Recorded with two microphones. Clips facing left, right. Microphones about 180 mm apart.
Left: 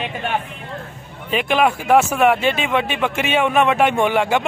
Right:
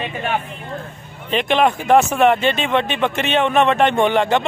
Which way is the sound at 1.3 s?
5° left (ahead or behind).